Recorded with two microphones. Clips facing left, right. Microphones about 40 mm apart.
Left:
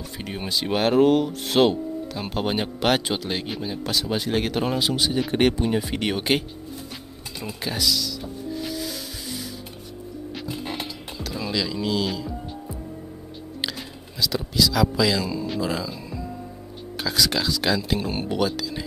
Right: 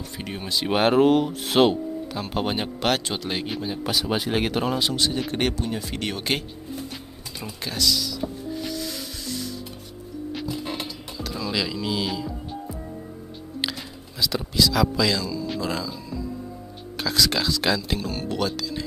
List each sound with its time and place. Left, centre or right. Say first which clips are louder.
0.2 s speech: even; centre
4.7 s speech: left 1 dB; centre
5.6 s speech: left 5 dB; centre
7.6 s speech: even; centre
8.2 s wood: right 5 dB; right
8.5 s music: even; centre
11.5 s speech: left 2 dB; centre
13.6 s speech: right 1 dB; centre
16.9 s speech: even; centre
17.9 s speech: left 3 dB; left
18.3 s speech: left 2 dB; centre